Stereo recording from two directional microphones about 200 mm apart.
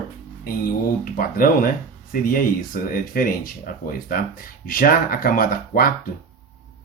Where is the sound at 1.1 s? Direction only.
45° left (ahead or behind).